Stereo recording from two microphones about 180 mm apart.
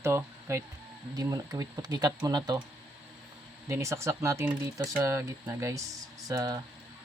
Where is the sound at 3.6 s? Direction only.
15° right (ahead or behind).